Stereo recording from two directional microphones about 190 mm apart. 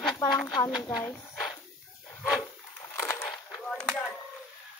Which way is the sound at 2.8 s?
15° left (ahead or behind).